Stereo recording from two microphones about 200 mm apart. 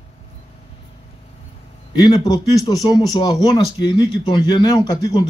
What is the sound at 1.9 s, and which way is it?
A man's voice, 20° left (ahead or behind).